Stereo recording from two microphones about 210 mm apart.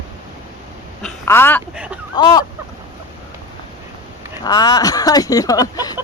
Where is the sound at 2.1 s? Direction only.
20° left (ahead or behind).